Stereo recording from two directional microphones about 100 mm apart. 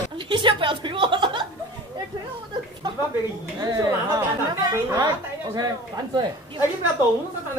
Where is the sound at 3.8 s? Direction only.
30° right (ahead or behind).